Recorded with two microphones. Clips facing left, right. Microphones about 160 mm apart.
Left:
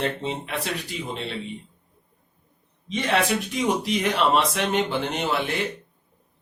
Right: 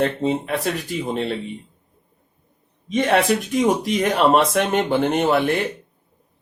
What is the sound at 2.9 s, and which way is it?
Speech, 50° right (ahead or behind).